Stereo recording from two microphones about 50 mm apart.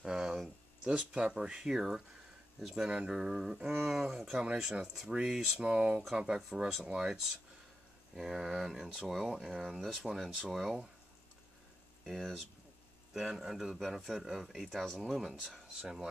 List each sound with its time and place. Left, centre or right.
0.0 s a sound: centre
0.8 s speech: centre
12.0 s speech: centre
13.1 s speech: centre
13.7 s speech: centre